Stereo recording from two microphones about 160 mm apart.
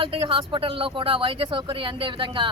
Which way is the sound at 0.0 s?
35° right (ahead or behind).